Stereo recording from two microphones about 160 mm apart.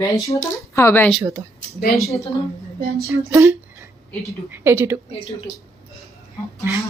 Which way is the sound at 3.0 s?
15° right (ahead or behind).